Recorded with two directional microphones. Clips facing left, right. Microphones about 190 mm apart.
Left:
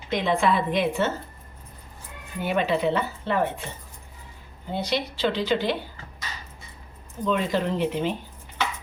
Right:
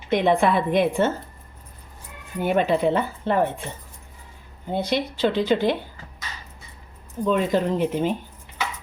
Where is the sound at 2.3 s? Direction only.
50° right (ahead or behind).